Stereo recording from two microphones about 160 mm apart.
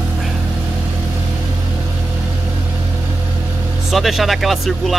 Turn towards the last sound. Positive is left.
turn(degrees=0)  # may be behind; listen again after turning